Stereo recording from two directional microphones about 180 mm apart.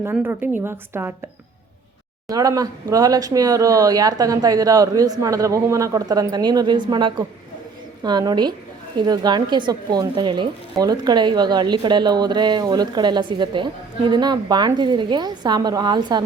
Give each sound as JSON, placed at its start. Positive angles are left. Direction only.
{"t": 0.0, "sound": "a woman's voice", "side_deg": -10}
{"t": 2.2, "sound": "speech", "side_deg": -20}